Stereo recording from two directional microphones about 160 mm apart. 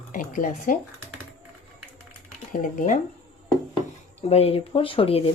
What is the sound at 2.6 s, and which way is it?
Speech, 55° left (ahead or behind).